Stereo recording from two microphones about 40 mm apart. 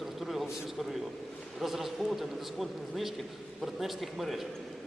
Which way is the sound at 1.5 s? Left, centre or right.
Centre.